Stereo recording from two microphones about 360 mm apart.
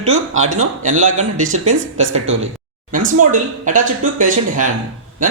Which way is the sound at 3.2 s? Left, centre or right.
Right.